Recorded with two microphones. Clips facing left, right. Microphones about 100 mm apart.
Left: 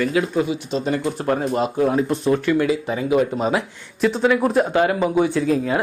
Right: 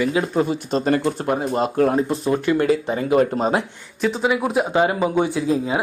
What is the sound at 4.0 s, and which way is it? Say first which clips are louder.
Speech: left 3 dB; centre (ahead or behind).